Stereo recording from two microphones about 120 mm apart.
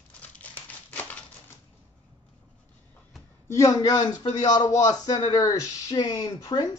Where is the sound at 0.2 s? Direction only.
10° left (ahead or behind).